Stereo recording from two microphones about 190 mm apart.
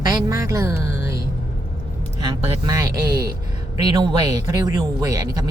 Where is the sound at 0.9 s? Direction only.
15° right (ahead or behind).